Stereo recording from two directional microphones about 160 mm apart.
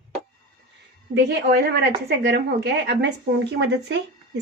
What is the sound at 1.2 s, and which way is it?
A woman's voice, 90° right.